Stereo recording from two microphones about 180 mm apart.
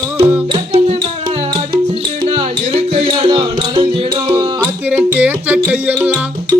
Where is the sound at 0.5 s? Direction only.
30° right (ahead or behind).